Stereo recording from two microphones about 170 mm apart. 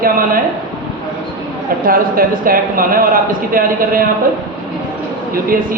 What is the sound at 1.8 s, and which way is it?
A woman's voice, 55° right (ahead or behind).